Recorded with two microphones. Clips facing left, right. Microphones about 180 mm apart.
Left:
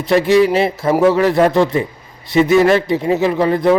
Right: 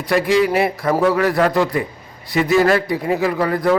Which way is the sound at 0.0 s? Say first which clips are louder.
Left 4 dB; 25° left (ahead or behind).